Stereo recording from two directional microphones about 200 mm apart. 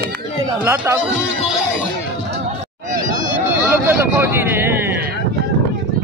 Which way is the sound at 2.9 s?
40° right (ahead or behind).